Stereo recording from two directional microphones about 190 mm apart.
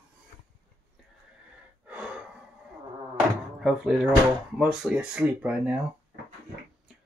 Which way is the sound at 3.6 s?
5° right (ahead or behind).